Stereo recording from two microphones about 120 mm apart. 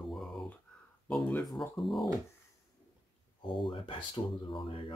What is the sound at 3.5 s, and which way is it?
Speech, 45° left (ahead or behind).